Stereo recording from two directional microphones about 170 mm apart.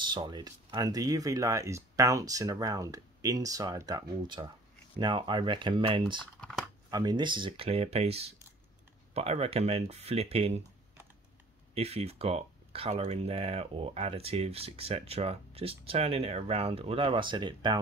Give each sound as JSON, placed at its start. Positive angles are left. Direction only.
{"t": 0.0, "sound": "speech", "side_deg": -25}
{"t": 11.7, "sound": "speech", "side_deg": -35}